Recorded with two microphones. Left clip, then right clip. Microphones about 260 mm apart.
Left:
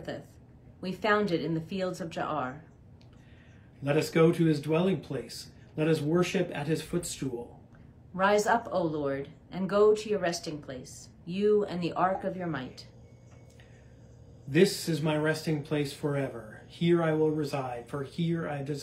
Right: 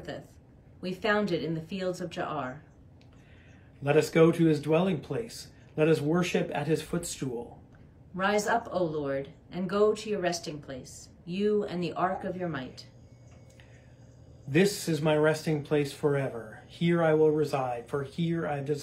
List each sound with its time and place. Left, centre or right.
0.7 s speech: centre
3.8 s speech: centre
8.2 s speech: centre
14.5 s speech: centre